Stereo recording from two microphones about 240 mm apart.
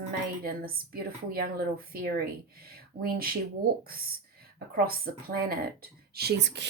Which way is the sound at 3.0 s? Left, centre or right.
Right.